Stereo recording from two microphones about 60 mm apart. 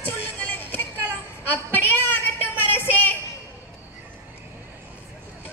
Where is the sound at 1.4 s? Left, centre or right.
Left.